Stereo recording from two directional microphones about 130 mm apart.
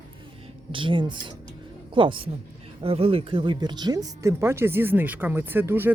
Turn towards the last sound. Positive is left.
turn(degrees=-15)  # may be behind; listen again after turning